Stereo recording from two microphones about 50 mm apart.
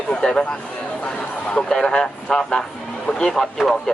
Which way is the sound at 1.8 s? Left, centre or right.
Centre.